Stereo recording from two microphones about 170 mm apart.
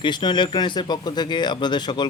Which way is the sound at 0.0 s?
25° left (ahead or behind).